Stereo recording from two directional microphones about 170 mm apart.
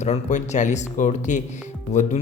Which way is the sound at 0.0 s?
45° left (ahead or behind).